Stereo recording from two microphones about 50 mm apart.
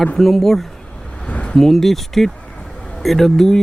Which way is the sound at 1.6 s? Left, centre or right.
Centre.